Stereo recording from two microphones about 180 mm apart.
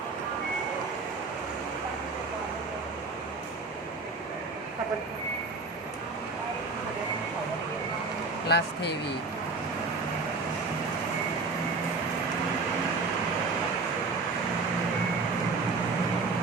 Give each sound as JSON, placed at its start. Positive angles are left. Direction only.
{"t": 8.4, "sound": "speech", "side_deg": 65}